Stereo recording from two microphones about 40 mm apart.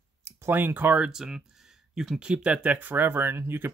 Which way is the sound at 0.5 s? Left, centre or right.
Right.